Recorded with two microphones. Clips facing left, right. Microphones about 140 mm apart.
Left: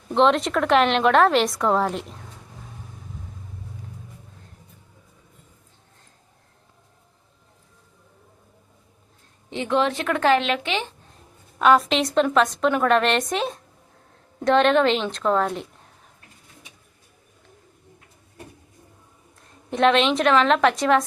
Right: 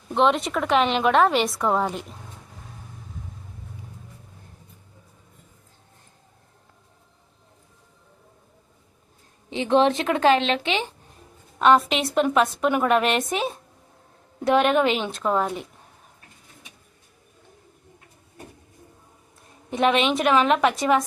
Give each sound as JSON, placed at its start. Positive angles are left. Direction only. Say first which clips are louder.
{"t": 0.1, "sound": "a woman's voice", "louder": "left 2 dB", "side_deg": 0}
{"t": 9.5, "sound": "a woman's voice", "louder": "right 3 dB", "side_deg": -20}
{"t": 11.6, "sound": "a woman's voice", "louder": "even", "side_deg": 0}
{"t": 19.7, "sound": "a woman's voice", "louder": "left 2 dB", "side_deg": -5}